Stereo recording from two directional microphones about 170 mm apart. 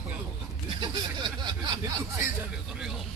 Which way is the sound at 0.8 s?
25° right (ahead or behind).